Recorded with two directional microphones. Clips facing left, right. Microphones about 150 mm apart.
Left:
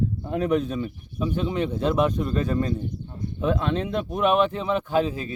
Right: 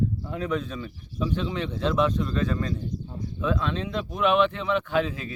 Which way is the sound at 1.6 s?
55° left (ahead or behind).